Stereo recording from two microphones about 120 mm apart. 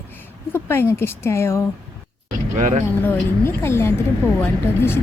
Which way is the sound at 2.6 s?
90° right.